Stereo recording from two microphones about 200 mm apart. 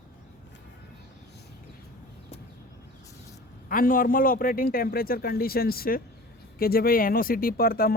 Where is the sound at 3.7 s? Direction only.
45° left (ahead or behind).